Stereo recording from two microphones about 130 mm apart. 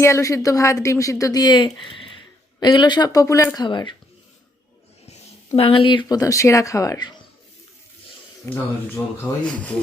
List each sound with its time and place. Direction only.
0.0 s speech: 20° left (ahead or behind)
5.5 s speech: 45° left (ahead or behind)
8.4 s speech: 25° left (ahead or behind)
9.4 s rub: 10° left (ahead or behind)